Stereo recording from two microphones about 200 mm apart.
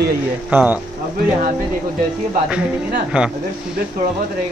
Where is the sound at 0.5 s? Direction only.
10° right (ahead or behind).